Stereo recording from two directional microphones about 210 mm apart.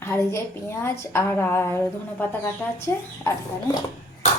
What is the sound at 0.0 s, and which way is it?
A woman's voice, 15° left (ahead or behind).